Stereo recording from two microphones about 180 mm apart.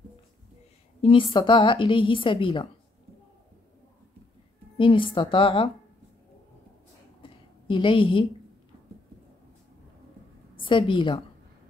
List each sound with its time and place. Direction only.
1.0 s a woman's voice: 30° left (ahead or behind)
4.7 s a woman's voice: 30° left (ahead or behind)
7.2 s a sound: 30° left (ahead or behind)
10.5 s a woman's voice: 30° left (ahead or behind)